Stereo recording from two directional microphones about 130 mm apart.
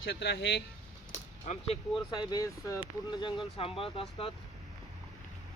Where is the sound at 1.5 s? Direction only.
55° left (ahead or behind).